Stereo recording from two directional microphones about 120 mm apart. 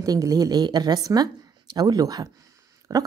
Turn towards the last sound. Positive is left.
turn(degrees=-30)  # may be behind; listen again after turning